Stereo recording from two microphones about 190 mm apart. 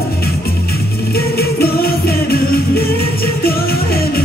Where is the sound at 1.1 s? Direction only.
55° left (ahead or behind).